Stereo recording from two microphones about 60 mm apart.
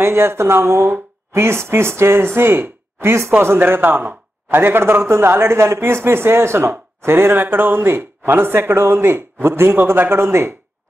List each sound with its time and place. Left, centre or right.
0.0 s a man's voice: right